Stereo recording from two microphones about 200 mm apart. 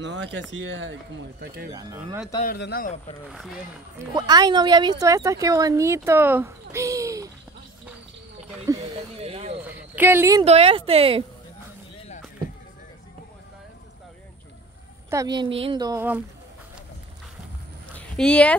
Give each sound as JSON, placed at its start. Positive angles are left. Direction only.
{"t": 0.0, "sound": "speech", "side_deg": -65}
{"t": 1.4, "sound": "speech", "side_deg": -55}
{"t": 1.7, "sound": "a woman's voice", "side_deg": -20}
{"t": 2.4, "sound": "speech", "side_deg": 50}
{"t": 3.3, "sound": "speech", "side_deg": 0}
{"t": 4.0, "sound": "a woman's voice", "side_deg": -20}
{"t": 9.2, "sound": "a sound", "side_deg": -30}
{"t": 9.9, "sound": "a child's voice", "side_deg": -10}
{"t": 10.4, "sound": "a woman's voice", "side_deg": -30}
{"t": 15.0, "sound": "a woman's voice", "side_deg": -20}
{"t": 17.9, "sound": "speech", "side_deg": 5}